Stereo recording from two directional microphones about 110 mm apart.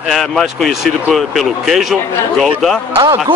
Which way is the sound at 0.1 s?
Centre (ahead or behind).